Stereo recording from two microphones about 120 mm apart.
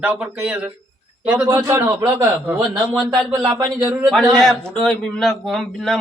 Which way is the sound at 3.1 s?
30° right (ahead or behind).